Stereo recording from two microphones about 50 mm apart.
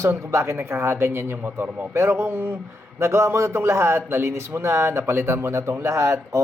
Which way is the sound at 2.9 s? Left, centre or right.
Right.